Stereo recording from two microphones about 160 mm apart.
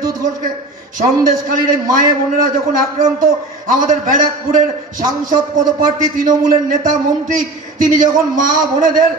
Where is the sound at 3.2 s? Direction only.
55° right (ahead or behind).